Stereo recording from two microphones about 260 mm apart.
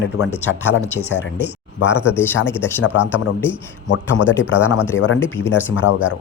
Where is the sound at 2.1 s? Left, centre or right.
Centre.